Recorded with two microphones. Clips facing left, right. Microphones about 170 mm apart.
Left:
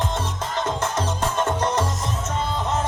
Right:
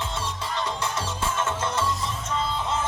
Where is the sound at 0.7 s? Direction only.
45° left (ahead or behind).